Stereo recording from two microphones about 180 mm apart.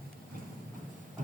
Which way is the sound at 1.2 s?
45° right (ahead or behind).